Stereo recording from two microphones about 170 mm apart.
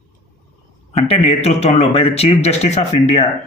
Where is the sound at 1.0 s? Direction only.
35° left (ahead or behind).